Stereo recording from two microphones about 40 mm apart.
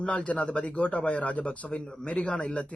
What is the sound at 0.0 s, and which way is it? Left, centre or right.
A man's voice, left.